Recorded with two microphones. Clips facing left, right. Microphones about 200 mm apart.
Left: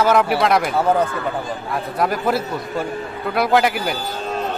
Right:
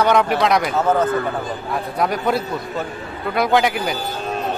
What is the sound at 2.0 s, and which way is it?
A man's voice, centre (ahead or behind).